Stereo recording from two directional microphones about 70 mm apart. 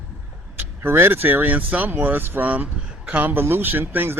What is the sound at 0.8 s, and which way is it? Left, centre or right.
Speech, right.